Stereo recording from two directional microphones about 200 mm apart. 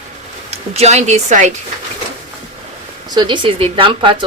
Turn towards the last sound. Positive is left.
turn(degrees=-25)  # may be behind; listen again after turning